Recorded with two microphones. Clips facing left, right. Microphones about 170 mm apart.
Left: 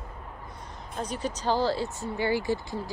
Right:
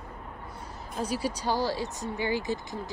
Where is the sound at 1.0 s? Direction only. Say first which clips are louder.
Right 1 dB; 10° right (ahead or behind).